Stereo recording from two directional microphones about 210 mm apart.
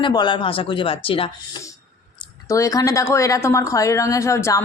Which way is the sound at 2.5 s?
15° left (ahead or behind).